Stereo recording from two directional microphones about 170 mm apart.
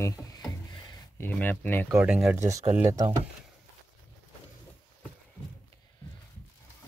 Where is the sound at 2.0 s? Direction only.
5° right (ahead or behind).